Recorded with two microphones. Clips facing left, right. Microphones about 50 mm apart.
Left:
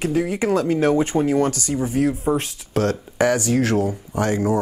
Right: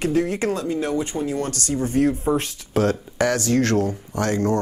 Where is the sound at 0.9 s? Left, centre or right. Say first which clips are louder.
Left 6 dB; left.